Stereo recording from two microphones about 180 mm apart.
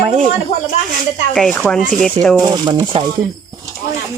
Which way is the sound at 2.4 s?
20° right (ahead or behind).